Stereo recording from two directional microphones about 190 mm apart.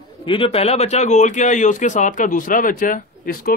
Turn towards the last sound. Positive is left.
turn(degrees=50)  # may be behind; listen again after turning